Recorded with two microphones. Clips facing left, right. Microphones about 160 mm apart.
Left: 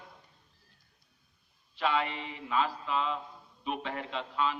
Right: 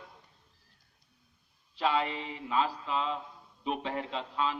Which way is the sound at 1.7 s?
35° right (ahead or behind).